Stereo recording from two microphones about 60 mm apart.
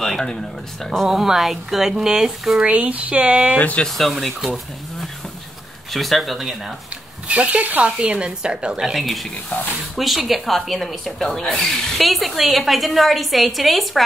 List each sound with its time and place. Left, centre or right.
0.0 s speech: centre
1.0 s speech: centre
2.6 s speech: right
3.5 s speech: left
3.8 s speech: centre
5.9 s speech: centre
7.2 s speech: right
9.0 s speech: centre